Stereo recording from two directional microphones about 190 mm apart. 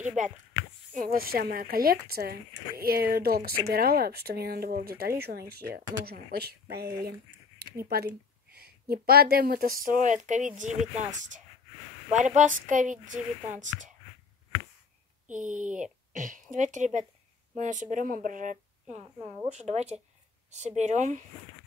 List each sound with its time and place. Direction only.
0.0 s a woman's voice: 40° right (ahead or behind)
15.2 s a woman's voice: 40° right (ahead or behind)